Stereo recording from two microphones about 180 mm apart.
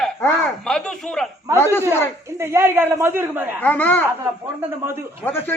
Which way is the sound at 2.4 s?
15° right (ahead or behind).